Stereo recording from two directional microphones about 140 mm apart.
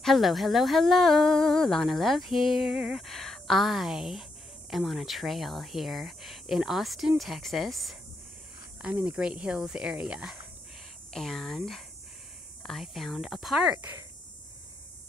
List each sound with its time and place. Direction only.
0.0 s speech: centre (ahead or behind)